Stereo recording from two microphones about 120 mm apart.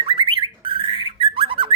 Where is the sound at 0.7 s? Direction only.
45° right (ahead or behind).